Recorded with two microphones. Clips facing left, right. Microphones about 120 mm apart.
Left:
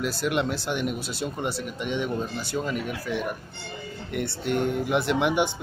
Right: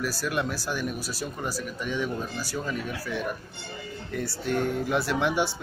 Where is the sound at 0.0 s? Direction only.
20° left (ahead or behind).